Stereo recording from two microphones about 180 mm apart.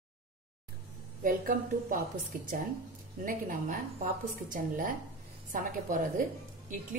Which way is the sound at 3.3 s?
50° right (ahead or behind).